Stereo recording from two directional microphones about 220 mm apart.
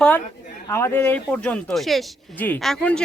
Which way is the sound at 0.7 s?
10° left (ahead or behind).